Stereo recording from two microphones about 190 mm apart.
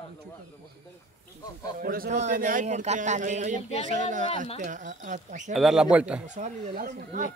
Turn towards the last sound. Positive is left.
turn(degrees=-45)  # may be behind; listen again after turning